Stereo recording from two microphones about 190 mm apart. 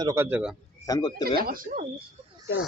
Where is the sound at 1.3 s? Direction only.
50° right (ahead or behind).